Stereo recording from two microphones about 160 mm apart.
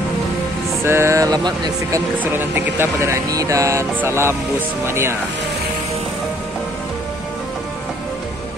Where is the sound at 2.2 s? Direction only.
10° right (ahead or behind).